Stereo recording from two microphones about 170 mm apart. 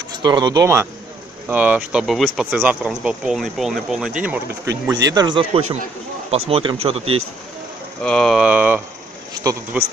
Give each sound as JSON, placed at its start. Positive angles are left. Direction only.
{"t": 0.2, "sound": "speech", "side_deg": -25}
{"t": 5.1, "sound": "speech", "side_deg": -25}
{"t": 8.0, "sound": "speech", "side_deg": 5}
{"t": 9.4, "sound": "speech", "side_deg": -20}